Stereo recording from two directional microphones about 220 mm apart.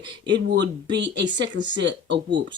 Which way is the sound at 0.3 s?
50° right (ahead or behind).